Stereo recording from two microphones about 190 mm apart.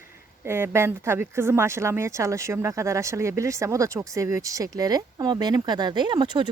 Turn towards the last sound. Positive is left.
turn(degrees=-25)  # may be behind; listen again after turning